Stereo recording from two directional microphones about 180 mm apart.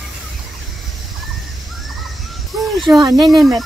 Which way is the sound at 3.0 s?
20° right (ahead or behind).